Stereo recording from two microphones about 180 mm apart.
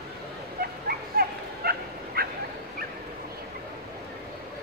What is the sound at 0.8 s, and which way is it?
Dog, 60° right (ahead or behind).